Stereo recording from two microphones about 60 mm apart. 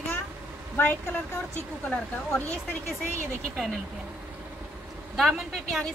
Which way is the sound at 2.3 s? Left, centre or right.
Left.